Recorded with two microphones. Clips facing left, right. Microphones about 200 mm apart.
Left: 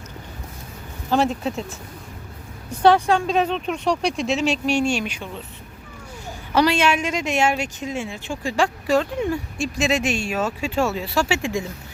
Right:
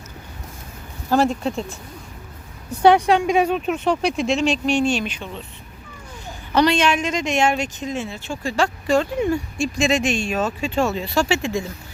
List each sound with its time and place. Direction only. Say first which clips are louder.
1.1 s speech: right 2 dB; centre (ahead or behind)
2.8 s speech: right 2 dB; 15° right (ahead or behind); by 5.3 s 10° left (ahead or behind)
6.5 s speech: right 1 dB; 5° left (ahead or behind)
8.9 s speech: right 4 dB; centre (ahead or behind)